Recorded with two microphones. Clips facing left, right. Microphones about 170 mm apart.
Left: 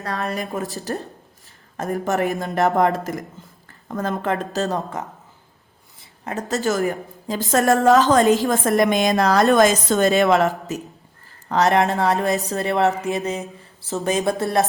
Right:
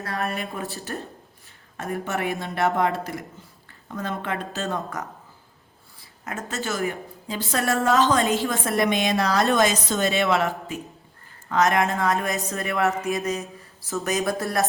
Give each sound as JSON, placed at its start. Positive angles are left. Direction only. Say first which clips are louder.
{"t": 0.3, "sound": "a woman's voice", "louder": "left 4 dB", "side_deg": 40}
{"t": 6.0, "sound": "a woman's voice", "louder": "left 5 dB", "side_deg": 35}
{"t": 12.8, "sound": "mantra", "louder": "even", "side_deg": 20}